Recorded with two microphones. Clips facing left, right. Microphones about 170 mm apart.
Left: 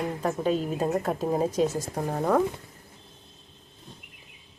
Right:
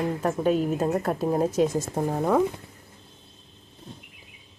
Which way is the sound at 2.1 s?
5° right (ahead or behind).